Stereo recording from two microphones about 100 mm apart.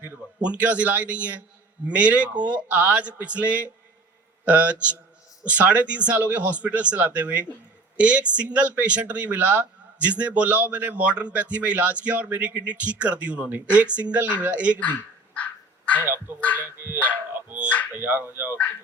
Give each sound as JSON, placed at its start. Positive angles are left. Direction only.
{"t": 0.4, "sound": "speech", "side_deg": -15}
{"t": 14.7, "sound": "speech", "side_deg": 15}
{"t": 16.0, "sound": "speech", "side_deg": -20}
{"t": 16.6, "sound": "dog", "side_deg": -15}
{"t": 17.9, "sound": "speech", "side_deg": -20}